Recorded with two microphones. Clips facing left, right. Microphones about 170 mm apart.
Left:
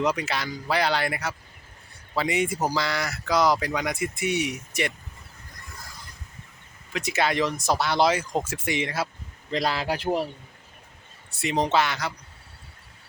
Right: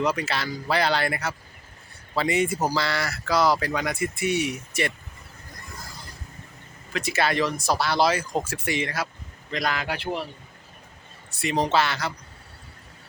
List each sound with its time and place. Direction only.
0.0 s speech: 20° left (ahead or behind)
6.9 s a man's voice: 20° left (ahead or behind); by 10.2 s 40° left (ahead or behind)
11.3 s speech: 20° left (ahead or behind)